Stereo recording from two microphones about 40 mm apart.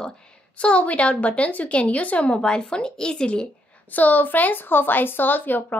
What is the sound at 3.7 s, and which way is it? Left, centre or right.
Speech, left.